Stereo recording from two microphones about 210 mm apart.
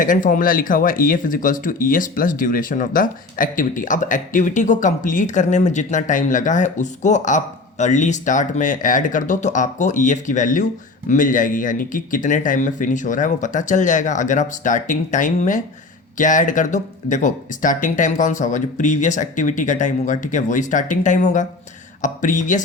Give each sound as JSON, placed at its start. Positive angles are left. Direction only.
{"t": 0.0, "sound": "speech", "side_deg": 40}